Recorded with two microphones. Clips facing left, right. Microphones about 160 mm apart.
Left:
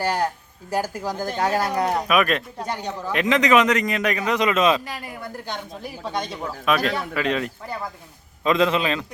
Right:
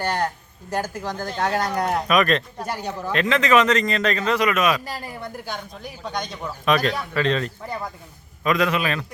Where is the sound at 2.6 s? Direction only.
5° right (ahead or behind).